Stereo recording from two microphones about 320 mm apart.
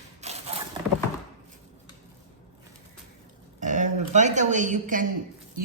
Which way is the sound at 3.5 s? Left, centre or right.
Right.